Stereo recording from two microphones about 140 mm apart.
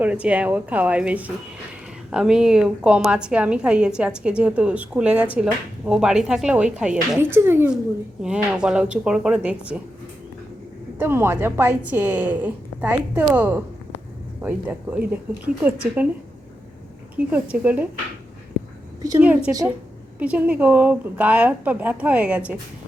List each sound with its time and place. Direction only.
0.0 s a woman's voice: 10° right (ahead or behind)
8.2 s a woman's voice: 5° right (ahead or behind)
10.9 s a woman's voice: 15° right (ahead or behind)
17.2 s a woman's voice: 10° right (ahead or behind)
19.2 s a woman's voice: 10° right (ahead or behind)